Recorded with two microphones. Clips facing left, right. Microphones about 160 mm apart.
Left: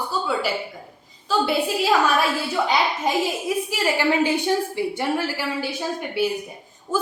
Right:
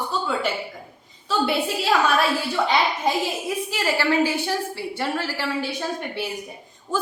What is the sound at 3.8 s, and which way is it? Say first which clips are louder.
A woman's voice: even; 15° left (ahead or behind).